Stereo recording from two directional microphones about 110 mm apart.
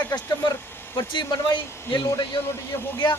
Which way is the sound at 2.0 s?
30° left (ahead or behind).